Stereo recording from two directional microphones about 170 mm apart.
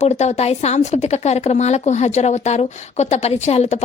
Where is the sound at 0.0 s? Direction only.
40° left (ahead or behind).